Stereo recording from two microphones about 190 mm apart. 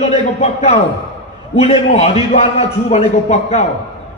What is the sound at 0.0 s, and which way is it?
A man's voice, 35° left (ahead or behind).